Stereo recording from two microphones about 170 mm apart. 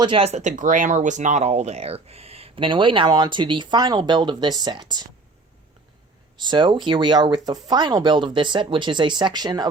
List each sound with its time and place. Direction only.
0.0 s speech: 35° right (ahead or behind)
6.3 s speech: 25° right (ahead or behind)